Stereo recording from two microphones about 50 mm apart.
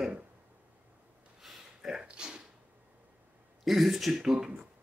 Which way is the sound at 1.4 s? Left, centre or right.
Centre.